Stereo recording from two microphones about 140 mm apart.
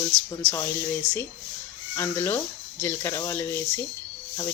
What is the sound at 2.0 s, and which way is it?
Speech, 15° left (ahead or behind).